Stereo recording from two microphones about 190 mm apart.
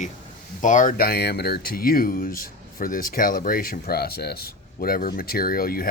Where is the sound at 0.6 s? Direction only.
40° left (ahead or behind).